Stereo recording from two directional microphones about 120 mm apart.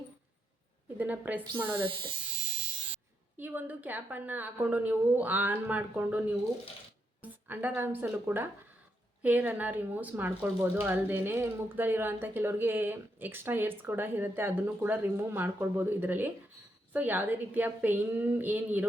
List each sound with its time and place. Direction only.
0.9 s speech: 15° right (ahead or behind)
1.7 s speech: 45° right (ahead or behind)
3.3 s a woman's voice: 15° right (ahead or behind)